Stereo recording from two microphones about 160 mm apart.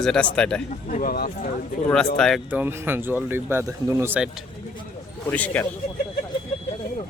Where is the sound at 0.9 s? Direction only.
50° left (ahead or behind).